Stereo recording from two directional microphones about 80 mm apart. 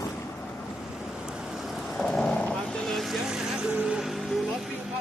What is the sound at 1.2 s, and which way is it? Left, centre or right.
Vehicle, centre.